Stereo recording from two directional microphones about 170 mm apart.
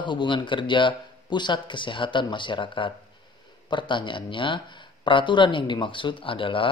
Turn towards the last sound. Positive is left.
turn(degrees=30)  # may be behind; listen again after turning